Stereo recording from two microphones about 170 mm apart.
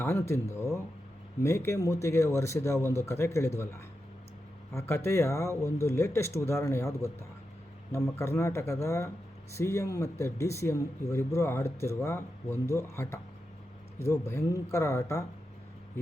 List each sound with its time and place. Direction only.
0.0 s speech: 15° left (ahead or behind)